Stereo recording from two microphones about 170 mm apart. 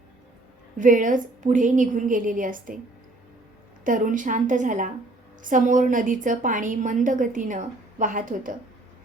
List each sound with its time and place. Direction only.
0.8 s a woman's voice: 50° right (ahead or behind)
3.8 s a woman's voice: 50° right (ahead or behind)